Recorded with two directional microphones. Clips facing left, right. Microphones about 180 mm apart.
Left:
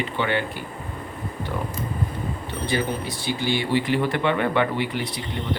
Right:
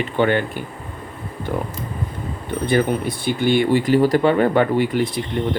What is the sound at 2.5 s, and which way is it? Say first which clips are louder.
Speech: right 8 dB; 55° right (ahead or behind).